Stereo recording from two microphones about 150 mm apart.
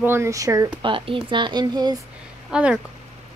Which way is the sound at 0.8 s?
35° right (ahead or behind).